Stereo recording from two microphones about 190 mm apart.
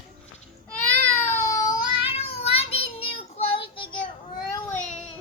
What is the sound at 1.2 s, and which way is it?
Child singing, 10° left (ahead or behind).